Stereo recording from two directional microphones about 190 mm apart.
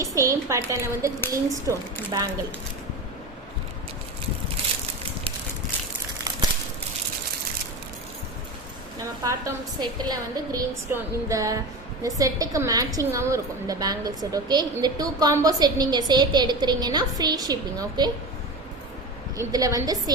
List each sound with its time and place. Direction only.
0.0 s a woman's voice: 15° right (ahead or behind)
9.0 s a woman's voice: 15° right (ahead or behind)
19.4 s a woman's voice: 20° right (ahead or behind)